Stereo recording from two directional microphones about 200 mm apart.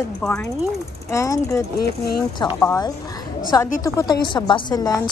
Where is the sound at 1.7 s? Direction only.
50° left (ahead or behind).